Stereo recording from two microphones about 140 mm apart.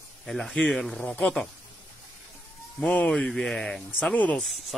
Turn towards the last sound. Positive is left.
turn(degrees=10)  # may be behind; listen again after turning